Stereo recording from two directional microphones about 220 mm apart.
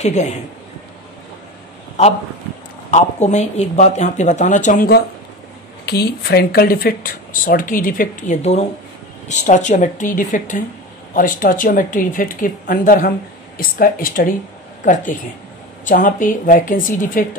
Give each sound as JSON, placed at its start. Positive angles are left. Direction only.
{"t": 0.0, "sound": "speech", "side_deg": 30}
{"t": 2.9, "sound": "speech", "side_deg": 30}